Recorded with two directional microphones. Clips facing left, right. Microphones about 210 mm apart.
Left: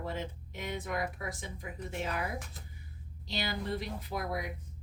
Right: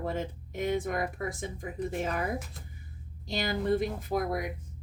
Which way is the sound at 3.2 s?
50° right (ahead or behind).